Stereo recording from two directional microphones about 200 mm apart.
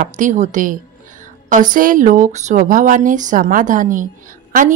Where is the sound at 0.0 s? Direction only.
40° right (ahead or behind).